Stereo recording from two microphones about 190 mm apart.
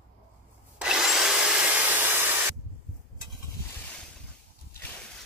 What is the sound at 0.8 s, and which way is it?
Wood, centre (ahead or behind).